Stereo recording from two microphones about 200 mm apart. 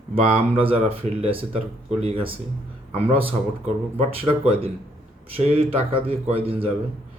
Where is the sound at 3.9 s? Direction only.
30° right (ahead or behind).